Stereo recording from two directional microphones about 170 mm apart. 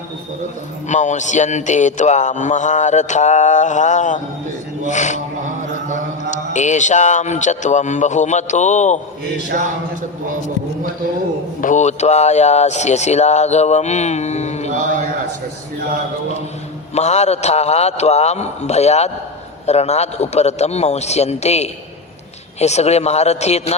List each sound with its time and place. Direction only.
0.9 s a man's voice: 45° left (ahead or behind)
6.3 s a man's voice: 45° left (ahead or behind)
11.6 s speech: 45° left (ahead or behind)
16.9 s speech: 40° left (ahead or behind)